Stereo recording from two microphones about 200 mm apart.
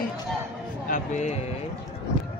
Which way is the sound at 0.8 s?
40° left (ahead or behind).